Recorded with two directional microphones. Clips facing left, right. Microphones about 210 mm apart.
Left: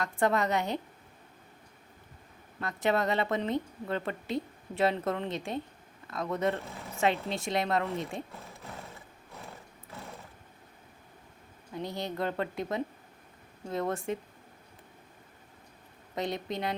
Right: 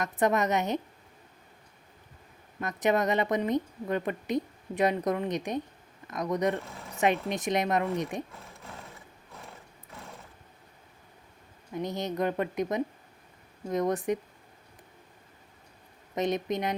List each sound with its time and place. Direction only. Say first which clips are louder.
0.0 s a woman's voice: right 2 dB; 20° right (ahead or behind)
2.6 s a woman's voice: right 2 dB; 20° right (ahead or behind)
11.7 s a woman's voice: right 3 dB; 20° right (ahead or behind)
16.1 s a woman's voice: right 5 dB; 20° right (ahead or behind)